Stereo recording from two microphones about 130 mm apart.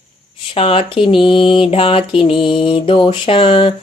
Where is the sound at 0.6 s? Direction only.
45° left (ahead or behind).